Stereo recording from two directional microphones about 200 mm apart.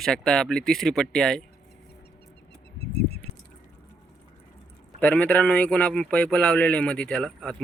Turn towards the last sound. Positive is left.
turn(degrees=5)  # may be behind; listen again after turning